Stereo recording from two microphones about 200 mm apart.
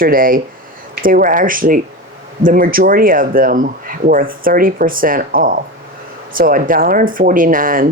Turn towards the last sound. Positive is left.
turn(degrees=-45)  # may be behind; listen again after turning